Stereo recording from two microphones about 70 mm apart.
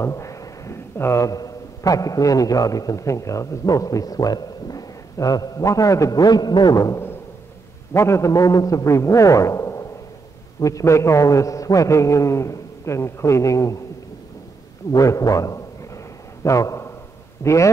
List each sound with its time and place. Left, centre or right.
0.0 s a sound: left
1.2 s a man's voice: left
7.9 s a man's voice: left
14.9 s a man's voice: left